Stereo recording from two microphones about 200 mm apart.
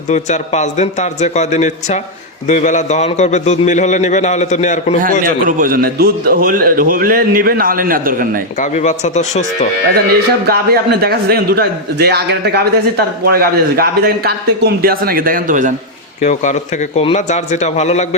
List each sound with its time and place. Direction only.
0.1 s a man's voice: 35° left (ahead or behind)
5.5 s a man's voice: 45° right (ahead or behind)
8.5 s a man's voice: 40° left (ahead or behind)
10.4 s a man's voice: 50° right (ahead or behind)
16.2 s a man's voice: 35° left (ahead or behind)